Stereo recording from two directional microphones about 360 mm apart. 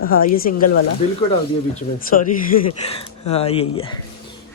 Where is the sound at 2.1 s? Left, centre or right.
Left.